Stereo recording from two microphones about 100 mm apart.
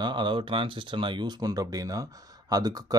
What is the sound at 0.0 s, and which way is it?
Speech, 50° right (ahead or behind).